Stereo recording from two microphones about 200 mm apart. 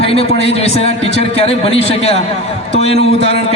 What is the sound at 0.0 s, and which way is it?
A man's voice, 30° left (ahead or behind).